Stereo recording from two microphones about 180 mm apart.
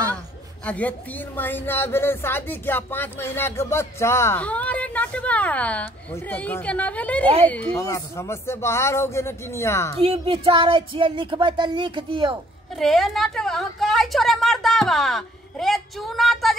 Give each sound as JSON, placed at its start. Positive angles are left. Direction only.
{"t": 0.7, "sound": "speech", "side_deg": 10}
{"t": 10.0, "sound": "speech", "side_deg": -35}
{"t": 12.7, "sound": "a woman's voice", "side_deg": 0}